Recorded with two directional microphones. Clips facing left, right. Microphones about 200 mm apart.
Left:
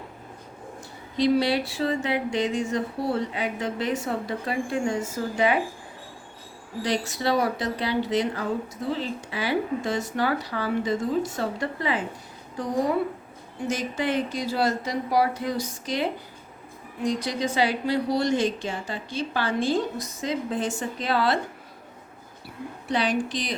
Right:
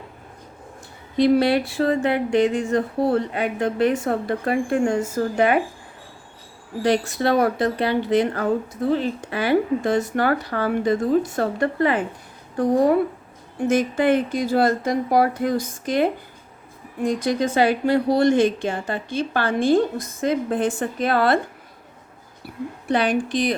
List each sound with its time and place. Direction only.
1.1 s speech: 55° right (ahead or behind)
6.8 s speech: 55° right (ahead or behind)
22.4 s a sound: 55° right (ahead or behind)
22.9 s speech: 55° right (ahead or behind)